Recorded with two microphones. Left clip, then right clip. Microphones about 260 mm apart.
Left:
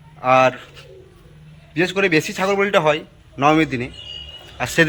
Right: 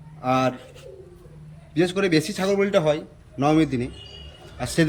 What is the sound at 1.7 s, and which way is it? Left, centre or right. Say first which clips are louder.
A man's voice: left 4 dB; centre.